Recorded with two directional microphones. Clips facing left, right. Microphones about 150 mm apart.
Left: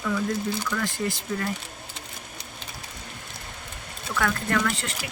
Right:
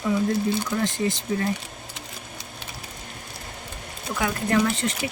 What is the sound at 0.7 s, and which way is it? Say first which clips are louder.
Speech: right 4 dB; 20° right (ahead or behind).